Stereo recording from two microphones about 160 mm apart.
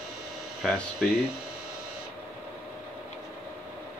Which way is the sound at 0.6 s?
Centre (ahead or behind).